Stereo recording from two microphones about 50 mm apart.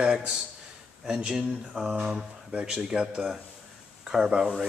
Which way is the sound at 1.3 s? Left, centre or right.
Centre.